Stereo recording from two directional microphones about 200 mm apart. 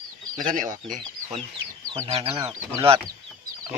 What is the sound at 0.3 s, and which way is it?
Speech, 40° right (ahead or behind).